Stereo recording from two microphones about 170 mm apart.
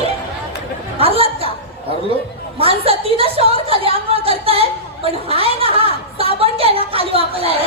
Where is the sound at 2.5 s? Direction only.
35° right (ahead or behind).